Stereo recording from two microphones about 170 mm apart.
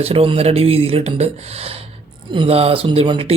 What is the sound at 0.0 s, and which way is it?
Speech, 35° right (ahead or behind).